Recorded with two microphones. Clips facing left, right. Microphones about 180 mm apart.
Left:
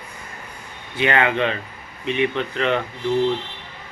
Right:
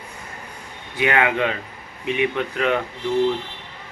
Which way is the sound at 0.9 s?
10° right (ahead or behind).